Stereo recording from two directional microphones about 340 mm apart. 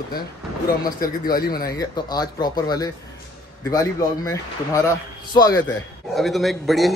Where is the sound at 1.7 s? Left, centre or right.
Centre.